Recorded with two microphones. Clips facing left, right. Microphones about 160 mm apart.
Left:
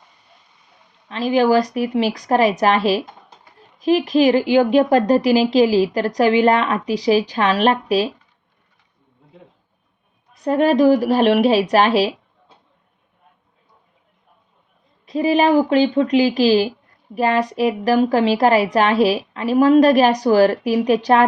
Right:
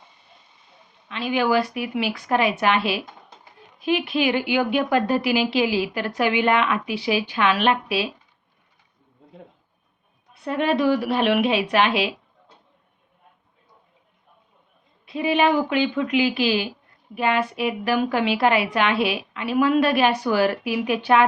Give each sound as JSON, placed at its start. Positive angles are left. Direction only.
{"t": 1.0, "sound": "a woman's voice", "side_deg": 35}
{"t": 10.3, "sound": "a woman's voice", "side_deg": 40}
{"t": 15.0, "sound": "a woman's voice", "side_deg": 40}